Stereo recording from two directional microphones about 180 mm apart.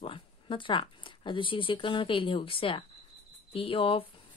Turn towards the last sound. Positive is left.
turn(degrees=30)  # may be behind; listen again after turning